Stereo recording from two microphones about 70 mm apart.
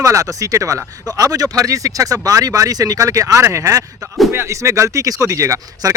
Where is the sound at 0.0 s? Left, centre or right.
Right.